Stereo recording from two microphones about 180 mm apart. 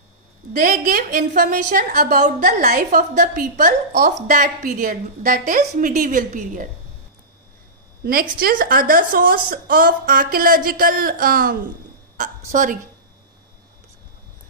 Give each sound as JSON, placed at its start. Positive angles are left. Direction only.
{"t": 0.5, "sound": "a woman's voice", "side_deg": -50}
{"t": 8.0, "sound": "a woman's voice", "side_deg": -55}